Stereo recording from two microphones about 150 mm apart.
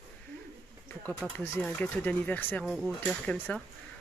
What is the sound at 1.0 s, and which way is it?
Speech, 15° left (ahead or behind).